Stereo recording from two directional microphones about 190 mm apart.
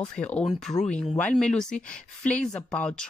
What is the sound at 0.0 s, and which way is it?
Speech, 5° left (ahead or behind).